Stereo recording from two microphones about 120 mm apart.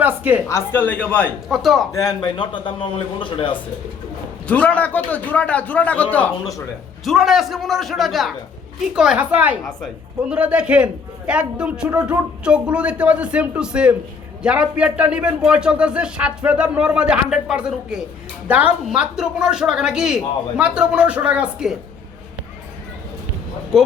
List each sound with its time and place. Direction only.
0.0 s a woman's voice: 15° right (ahead or behind)
0.4 s a man's voice: 20° left (ahead or behind)
1.5 s a man's voice: centre (ahead or behind)
1.9 s a man's voice: 30° left (ahead or behind); by 3.6 s 45° left (ahead or behind)
4.4 s a man's voice: 10° left (ahead or behind)
7.0 s a man's voice: centre (ahead or behind)